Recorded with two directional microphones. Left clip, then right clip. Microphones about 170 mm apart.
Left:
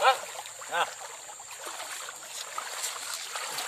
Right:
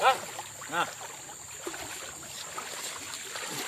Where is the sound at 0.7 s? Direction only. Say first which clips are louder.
Left 1 dB; 55° left (ahead or behind).